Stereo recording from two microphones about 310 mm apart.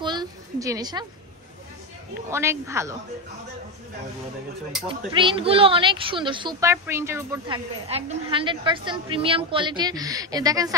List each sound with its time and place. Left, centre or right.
0.0 s a sound: centre
2.3 s a woman's voice: centre
4.8 s a woman's voice: centre